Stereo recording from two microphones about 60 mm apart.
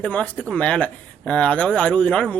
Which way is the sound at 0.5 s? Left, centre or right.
Centre.